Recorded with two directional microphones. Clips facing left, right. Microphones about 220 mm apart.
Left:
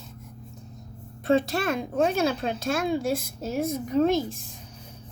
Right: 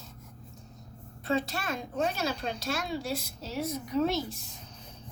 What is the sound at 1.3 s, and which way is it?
A child's voice, 50° left (ahead or behind).